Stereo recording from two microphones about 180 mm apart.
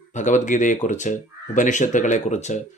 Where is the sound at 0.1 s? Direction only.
40° left (ahead or behind).